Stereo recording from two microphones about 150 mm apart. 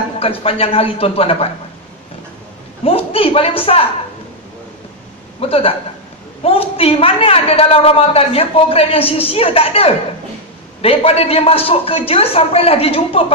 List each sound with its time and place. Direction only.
0.2 s a woman's voice: 40° left (ahead or behind)
2.8 s a woman's voice: 40° left (ahead or behind)
5.4 s a woman's voice: 40° left (ahead or behind)